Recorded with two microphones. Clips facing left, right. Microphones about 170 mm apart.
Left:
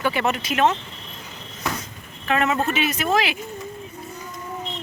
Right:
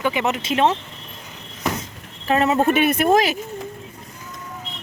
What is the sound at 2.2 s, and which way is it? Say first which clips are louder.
Speech: right 3 dB; 35° right (ahead or behind).